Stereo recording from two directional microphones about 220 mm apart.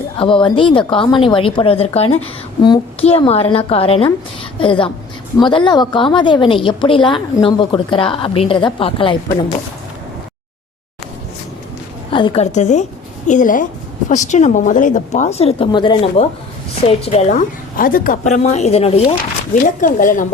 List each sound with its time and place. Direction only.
0.2 s speech: 25° left (ahead or behind)
12.1 s speech: 25° left (ahead or behind)
17.7 s speech: 40° left (ahead or behind)